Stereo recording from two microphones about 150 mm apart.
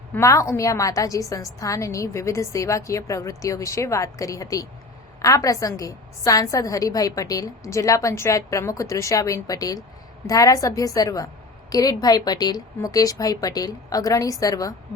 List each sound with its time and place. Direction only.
0.1 s a woman's voice: 20° left (ahead or behind)